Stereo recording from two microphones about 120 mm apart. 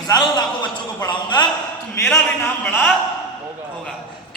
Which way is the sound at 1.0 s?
40° left (ahead or behind).